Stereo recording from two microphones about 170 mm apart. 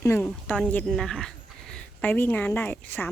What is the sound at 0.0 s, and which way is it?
Speech, 15° left (ahead or behind).